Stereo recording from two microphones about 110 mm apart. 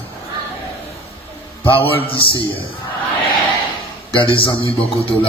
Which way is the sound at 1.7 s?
60° left (ahead or behind).